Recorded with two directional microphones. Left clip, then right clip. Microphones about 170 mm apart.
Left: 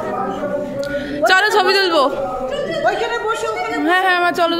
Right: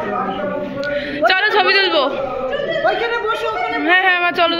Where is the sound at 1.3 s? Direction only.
30° left (ahead or behind).